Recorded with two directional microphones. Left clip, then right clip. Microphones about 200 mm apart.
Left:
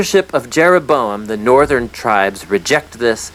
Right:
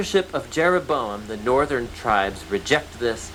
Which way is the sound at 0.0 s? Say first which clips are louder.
Left 8 dB; 40° left (ahead or behind).